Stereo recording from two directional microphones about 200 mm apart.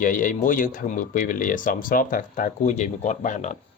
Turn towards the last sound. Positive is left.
turn(degrees=40)  # may be behind; listen again after turning